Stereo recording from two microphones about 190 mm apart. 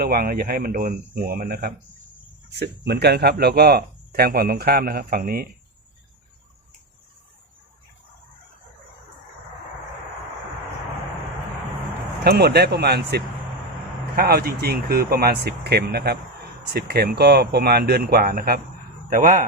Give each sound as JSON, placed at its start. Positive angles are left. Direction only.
{"t": 0.0, "sound": "speech", "side_deg": -50}
{"t": 12.2, "sound": "speech", "side_deg": -55}